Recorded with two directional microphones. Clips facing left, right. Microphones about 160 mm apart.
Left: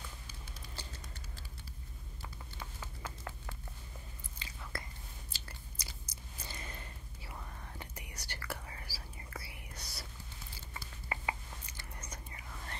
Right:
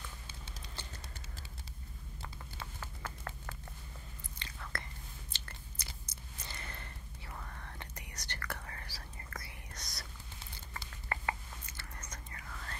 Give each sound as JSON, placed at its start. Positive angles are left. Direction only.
{"t": 2.8, "sound": "clip-clop", "side_deg": 15}
{"t": 4.4, "sound": "whispering", "side_deg": 10}
{"t": 5.8, "sound": "chewing", "side_deg": 10}
{"t": 6.4, "sound": "whispering", "side_deg": 15}